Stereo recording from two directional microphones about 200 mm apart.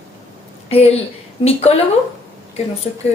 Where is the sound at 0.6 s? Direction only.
30° left (ahead or behind).